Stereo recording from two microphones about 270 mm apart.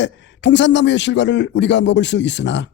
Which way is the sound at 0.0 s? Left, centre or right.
Left.